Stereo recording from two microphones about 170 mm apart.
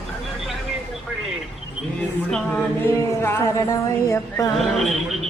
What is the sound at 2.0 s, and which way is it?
A capella, 5° left (ahead or behind).